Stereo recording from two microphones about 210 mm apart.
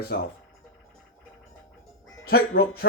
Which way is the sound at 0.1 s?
50° left (ahead or behind).